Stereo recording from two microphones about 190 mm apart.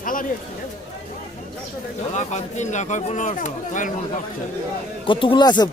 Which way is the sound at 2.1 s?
40° left (ahead or behind).